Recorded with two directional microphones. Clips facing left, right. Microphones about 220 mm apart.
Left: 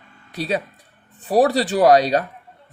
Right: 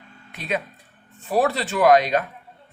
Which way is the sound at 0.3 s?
35° left (ahead or behind).